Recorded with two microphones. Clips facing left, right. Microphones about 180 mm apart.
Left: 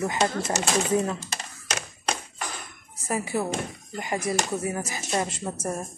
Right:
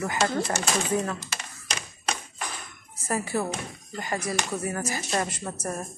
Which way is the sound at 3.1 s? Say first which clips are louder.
Left 1 dB; 10° left (ahead or behind).